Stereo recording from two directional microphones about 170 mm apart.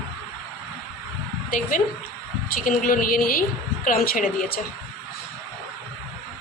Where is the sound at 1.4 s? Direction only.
50° left (ahead or behind).